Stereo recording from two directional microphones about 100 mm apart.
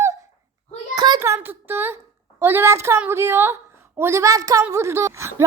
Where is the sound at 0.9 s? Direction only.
45° right (ahead or behind).